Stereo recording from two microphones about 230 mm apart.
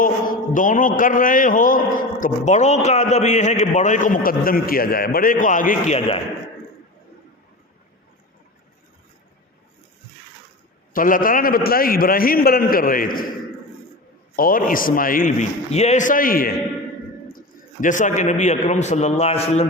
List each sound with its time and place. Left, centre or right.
0.0 s a man's voice: left
10.9 s a man's voice: left
14.3 s a man's voice: left